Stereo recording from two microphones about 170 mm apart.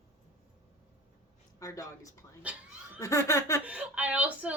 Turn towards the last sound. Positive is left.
turn(degrees=-10)  # may be behind; listen again after turning